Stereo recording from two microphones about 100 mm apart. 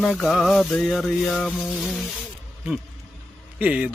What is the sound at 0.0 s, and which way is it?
Music, 5° left (ahead or behind).